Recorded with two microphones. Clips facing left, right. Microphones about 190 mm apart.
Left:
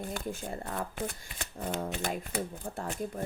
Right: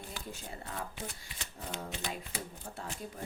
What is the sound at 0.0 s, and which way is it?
Speech, 50° left (ahead or behind).